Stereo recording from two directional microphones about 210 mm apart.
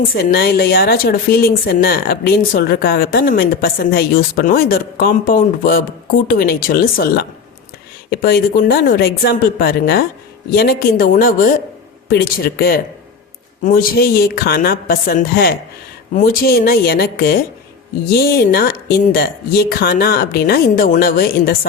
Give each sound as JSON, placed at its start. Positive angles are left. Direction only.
{"t": 0.0, "sound": "a woman's voice", "side_deg": 45}